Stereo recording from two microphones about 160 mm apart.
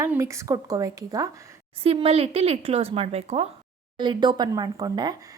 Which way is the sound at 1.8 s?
40° right (ahead or behind).